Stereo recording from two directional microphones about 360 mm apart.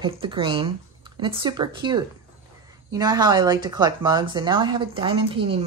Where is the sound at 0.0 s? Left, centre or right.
Centre.